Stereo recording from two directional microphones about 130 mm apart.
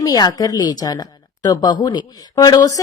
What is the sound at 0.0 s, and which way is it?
A woman's voice, 30° left (ahead or behind).